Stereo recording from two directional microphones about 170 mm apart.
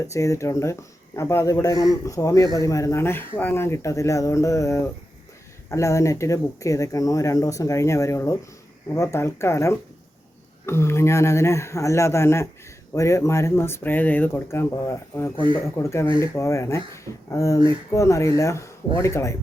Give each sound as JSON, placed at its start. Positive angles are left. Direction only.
{"t": 0.0, "sound": "speech", "side_deg": 20}